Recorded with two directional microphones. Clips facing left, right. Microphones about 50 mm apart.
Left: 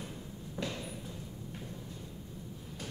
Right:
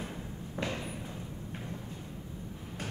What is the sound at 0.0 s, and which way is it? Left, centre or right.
Thump, right.